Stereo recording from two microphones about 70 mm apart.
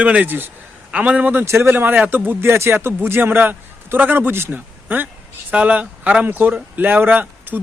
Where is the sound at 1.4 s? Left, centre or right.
Right.